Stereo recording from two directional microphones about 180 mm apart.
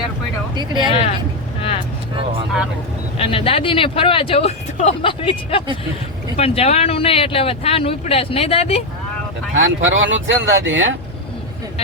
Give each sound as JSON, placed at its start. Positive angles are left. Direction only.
{"t": 0.5, "sound": "speech", "side_deg": -25}
{"t": 3.2, "sound": "speech", "side_deg": 30}
{"t": 9.6, "sound": "speech", "side_deg": -90}